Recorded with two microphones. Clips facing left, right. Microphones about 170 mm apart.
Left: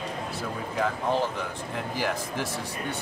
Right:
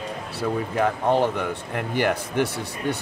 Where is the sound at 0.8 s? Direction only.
65° right (ahead or behind).